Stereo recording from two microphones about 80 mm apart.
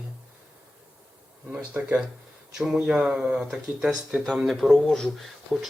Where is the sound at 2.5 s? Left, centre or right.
Centre.